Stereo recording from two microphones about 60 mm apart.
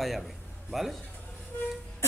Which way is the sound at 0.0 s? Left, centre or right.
Centre.